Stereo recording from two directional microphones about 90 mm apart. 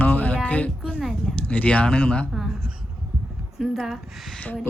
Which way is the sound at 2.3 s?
5° right (ahead or behind).